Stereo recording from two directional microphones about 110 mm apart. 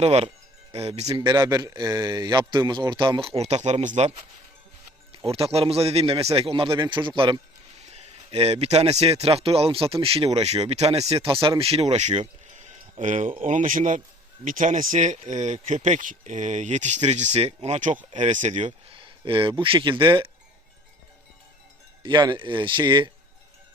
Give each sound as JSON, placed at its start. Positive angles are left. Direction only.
{"t": 0.0, "sound": "speech", "side_deg": -70}
{"t": 1.1, "sound": "speech", "side_deg": -45}
{"t": 5.1, "sound": "a man's voice", "side_deg": -60}
{"t": 7.9, "sound": "a man's voice", "side_deg": -75}
{"t": 10.3, "sound": "speech", "side_deg": -75}
{"t": 11.6, "sound": "speech", "side_deg": -65}
{"t": 12.5, "sound": "a sound", "side_deg": -90}
{"t": 14.9, "sound": "speech", "side_deg": -90}
{"t": 18.1, "sound": "speech", "side_deg": -90}
{"t": 18.9, "sound": "speech", "side_deg": -50}
{"t": 22.0, "sound": "a man's voice", "side_deg": -45}